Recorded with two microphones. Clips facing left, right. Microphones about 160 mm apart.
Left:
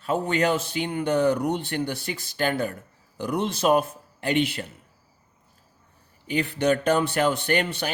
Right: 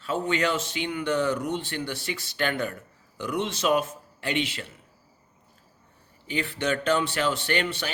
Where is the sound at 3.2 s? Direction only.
50° left (ahead or behind).